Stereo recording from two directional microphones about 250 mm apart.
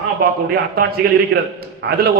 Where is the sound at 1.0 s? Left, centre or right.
Right.